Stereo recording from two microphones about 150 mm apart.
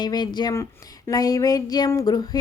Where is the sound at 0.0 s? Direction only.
30° left (ahead or behind).